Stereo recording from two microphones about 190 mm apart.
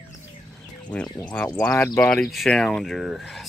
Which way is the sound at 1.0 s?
20° left (ahead or behind).